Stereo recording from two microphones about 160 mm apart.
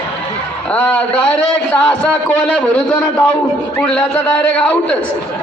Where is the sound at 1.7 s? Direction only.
10° left (ahead or behind).